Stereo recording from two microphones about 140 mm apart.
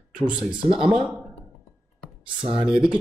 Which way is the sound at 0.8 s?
5° right (ahead or behind).